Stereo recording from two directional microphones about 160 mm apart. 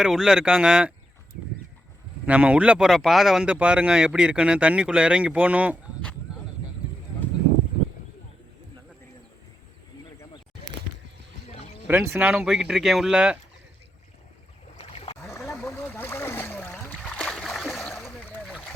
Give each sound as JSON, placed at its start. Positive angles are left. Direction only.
{"t": 0.0, "sound": "speech", "side_deg": 0}
{"t": 2.2, "sound": "speech", "side_deg": -10}
{"t": 11.9, "sound": "speech", "side_deg": -15}
{"t": 15.2, "sound": "a sound", "side_deg": 15}
{"t": 15.6, "sound": "splash", "side_deg": 10}
{"t": 18.4, "sound": "a sound", "side_deg": 0}